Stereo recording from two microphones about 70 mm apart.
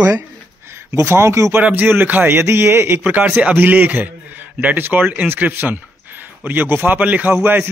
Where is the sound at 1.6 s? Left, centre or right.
Right.